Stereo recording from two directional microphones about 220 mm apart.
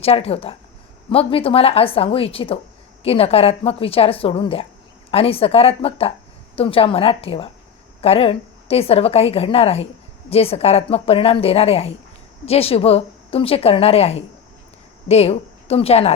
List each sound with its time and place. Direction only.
0.0 s a woman's voice: 25° left (ahead or behind)